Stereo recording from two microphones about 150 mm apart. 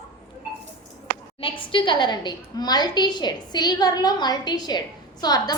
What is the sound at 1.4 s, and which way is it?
A woman's voice, 35° left (ahead or behind).